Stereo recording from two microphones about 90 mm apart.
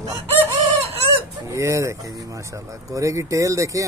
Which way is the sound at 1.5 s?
35° right (ahead or behind).